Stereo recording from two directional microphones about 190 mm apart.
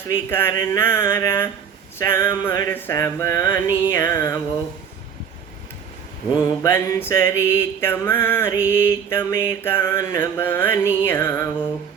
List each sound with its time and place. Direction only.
0.1 s mantra: 10° left (ahead or behind)
6.3 s mantra: 15° left (ahead or behind)